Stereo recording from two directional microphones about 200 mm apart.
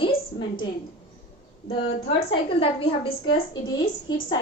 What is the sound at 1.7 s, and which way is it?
A woman's voice, 30° left (ahead or behind).